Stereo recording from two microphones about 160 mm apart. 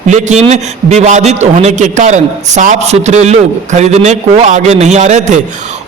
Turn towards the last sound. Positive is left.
turn(degrees=-45)  # may be behind; listen again after turning